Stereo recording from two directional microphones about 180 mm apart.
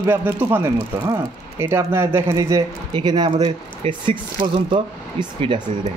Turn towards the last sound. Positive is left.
turn(degrees=-30)  # may be behind; listen again after turning